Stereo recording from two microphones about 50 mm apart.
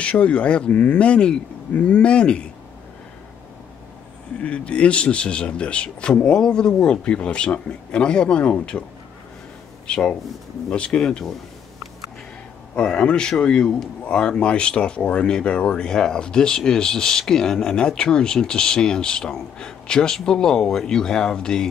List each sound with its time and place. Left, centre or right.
0.0 s speech: left
4.4 s speech: left
9.8 s speech: centre
12.7 s speech: left